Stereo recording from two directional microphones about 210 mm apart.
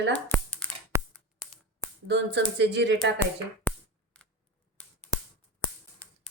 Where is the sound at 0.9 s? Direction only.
15° right (ahead or behind).